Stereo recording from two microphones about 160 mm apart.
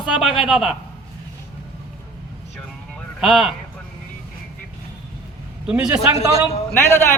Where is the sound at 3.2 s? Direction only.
Centre (ahead or behind).